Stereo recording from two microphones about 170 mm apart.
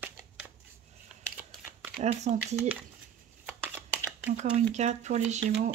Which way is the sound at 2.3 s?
50° right (ahead or behind).